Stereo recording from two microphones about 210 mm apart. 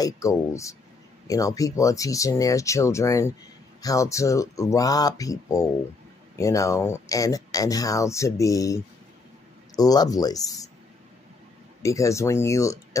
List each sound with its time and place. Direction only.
0.0 s speech: 15° left (ahead or behind)
11.8 s speech: 15° left (ahead or behind)